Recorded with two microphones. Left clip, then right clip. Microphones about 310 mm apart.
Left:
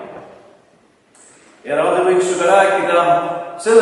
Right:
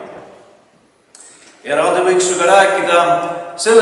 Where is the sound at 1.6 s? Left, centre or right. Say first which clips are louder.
Right 1 dB; centre.